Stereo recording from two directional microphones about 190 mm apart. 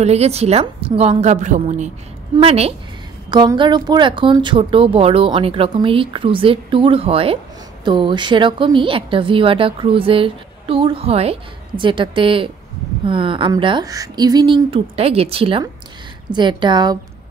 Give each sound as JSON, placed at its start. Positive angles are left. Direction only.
{"t": 0.0, "sound": "a woman's voice", "side_deg": -35}